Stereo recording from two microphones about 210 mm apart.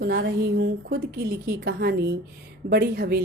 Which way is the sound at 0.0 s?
55° right (ahead or behind).